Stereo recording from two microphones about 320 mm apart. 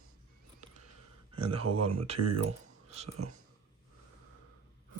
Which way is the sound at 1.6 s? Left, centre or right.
Right.